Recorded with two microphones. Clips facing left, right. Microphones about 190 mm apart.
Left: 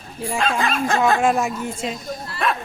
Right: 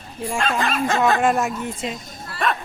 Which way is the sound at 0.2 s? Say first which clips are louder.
Left 1 dB; centre (ahead or behind).